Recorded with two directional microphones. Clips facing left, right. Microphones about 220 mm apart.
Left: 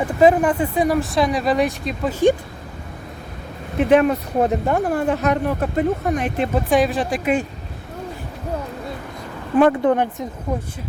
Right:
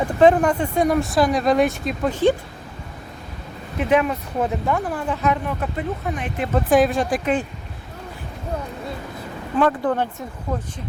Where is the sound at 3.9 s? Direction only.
40° left (ahead or behind).